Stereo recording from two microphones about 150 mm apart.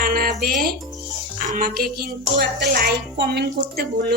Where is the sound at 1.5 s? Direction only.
75° right (ahead or behind).